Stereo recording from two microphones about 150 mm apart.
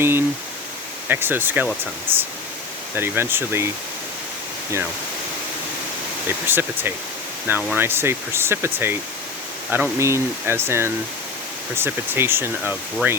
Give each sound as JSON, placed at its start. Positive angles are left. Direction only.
{"t": 0.0, "sound": "pink noise", "side_deg": -15}
{"t": 1.0, "sound": "speech", "side_deg": -15}
{"t": 2.9, "sound": "speech", "side_deg": -15}
{"t": 6.2, "sound": "speech", "side_deg": -15}